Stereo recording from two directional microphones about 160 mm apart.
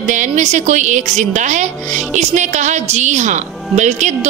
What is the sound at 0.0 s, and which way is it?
A woman's voice, 50° right (ahead or behind).